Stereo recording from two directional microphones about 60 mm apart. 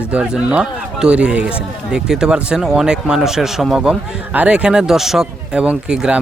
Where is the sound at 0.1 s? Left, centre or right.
Right.